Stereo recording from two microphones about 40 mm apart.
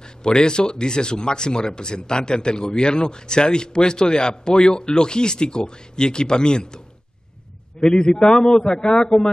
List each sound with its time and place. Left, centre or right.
0.0 s speech: centre
7.9 s speech: left